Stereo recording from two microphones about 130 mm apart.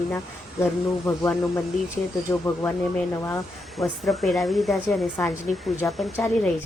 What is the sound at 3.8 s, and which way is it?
Speech, centre (ahead or behind).